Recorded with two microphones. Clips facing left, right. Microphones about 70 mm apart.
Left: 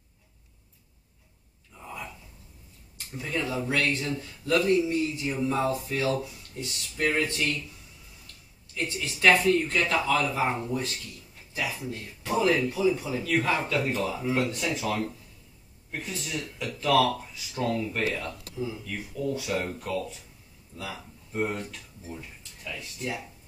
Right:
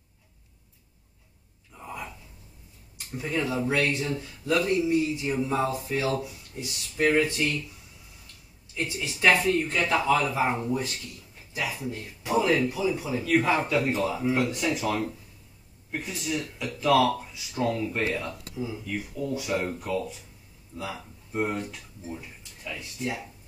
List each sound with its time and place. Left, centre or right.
1.8 s a sound: centre
3.2 s speech: centre
8.7 s speech: centre
9.7 s speech: centre
13.8 s speech: centre